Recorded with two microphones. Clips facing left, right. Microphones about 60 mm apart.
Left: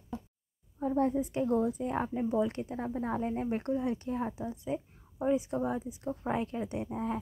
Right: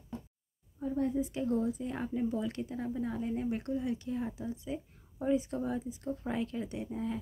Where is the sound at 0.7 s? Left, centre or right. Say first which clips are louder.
Left 4 dB; left.